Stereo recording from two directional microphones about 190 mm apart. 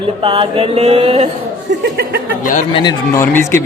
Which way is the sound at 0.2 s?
30° right (ahead or behind).